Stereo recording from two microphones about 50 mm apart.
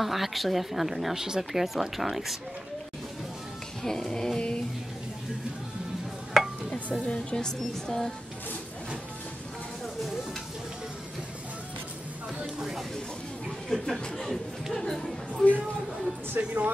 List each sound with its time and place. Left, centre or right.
0.0 s a woman's voice: centre
3.8 s speech: centre
6.3 s a sound: centre
6.7 s speech: left
12.5 s a sound: centre
13.7 s a woman's voice: centre
16.3 s speech: right